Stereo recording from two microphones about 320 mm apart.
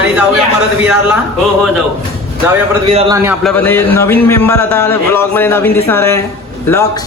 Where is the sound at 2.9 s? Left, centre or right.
Centre.